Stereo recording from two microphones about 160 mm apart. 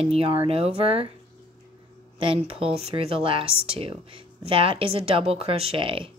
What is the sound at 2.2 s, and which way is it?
Speech, 35° right (ahead or behind).